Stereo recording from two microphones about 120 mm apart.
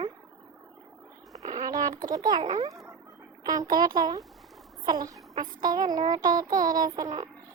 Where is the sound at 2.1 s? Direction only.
35° right (ahead or behind).